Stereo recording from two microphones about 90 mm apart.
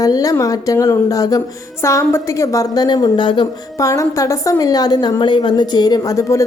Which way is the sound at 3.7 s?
35° left (ahead or behind).